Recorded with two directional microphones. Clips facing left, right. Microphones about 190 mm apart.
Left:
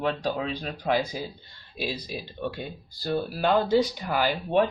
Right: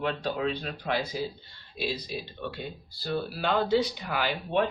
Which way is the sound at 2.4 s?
45° left (ahead or behind).